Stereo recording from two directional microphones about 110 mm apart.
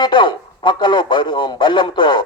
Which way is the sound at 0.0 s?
50° left (ahead or behind).